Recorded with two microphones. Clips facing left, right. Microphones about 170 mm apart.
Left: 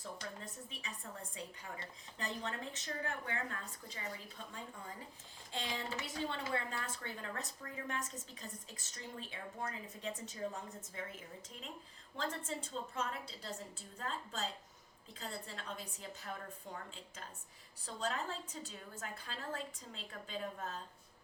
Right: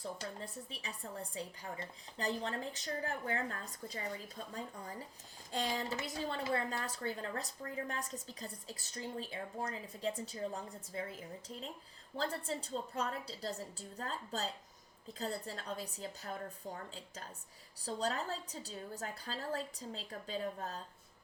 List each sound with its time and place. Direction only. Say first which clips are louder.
0.2 s a woman's voice: right 3 dB; 35° right (ahead or behind)
12.1 s a woman's voice: right 3 dB; 35° right (ahead or behind)
17.8 s a woman's voice: right 3 dB; 35° right (ahead or behind)